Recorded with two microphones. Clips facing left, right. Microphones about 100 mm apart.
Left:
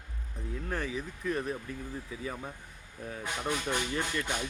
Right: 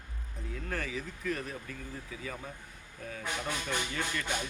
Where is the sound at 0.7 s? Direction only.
20° left (ahead or behind).